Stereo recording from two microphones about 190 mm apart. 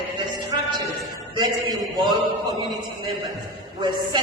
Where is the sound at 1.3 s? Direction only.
20° right (ahead or behind).